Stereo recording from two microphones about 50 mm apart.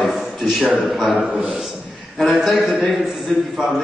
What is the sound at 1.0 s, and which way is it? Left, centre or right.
A man's voice, centre.